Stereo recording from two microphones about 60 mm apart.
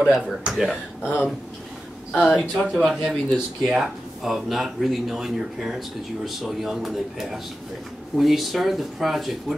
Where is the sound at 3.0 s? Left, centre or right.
Centre.